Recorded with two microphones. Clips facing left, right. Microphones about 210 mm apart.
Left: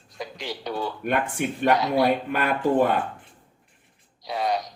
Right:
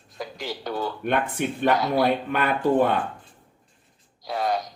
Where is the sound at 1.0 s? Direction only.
10° left (ahead or behind).